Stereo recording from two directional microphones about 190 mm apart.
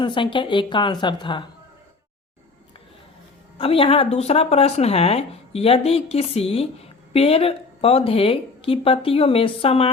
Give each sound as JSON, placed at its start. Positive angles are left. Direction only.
{"t": 0.0, "sound": "a woman's voice", "side_deg": 25}
{"t": 3.6, "sound": "speech", "side_deg": 30}